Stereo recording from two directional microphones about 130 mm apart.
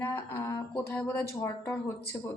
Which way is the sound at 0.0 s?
20° left (ahead or behind).